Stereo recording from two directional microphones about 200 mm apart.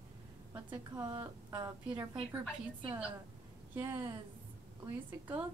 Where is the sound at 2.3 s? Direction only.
5° right (ahead or behind).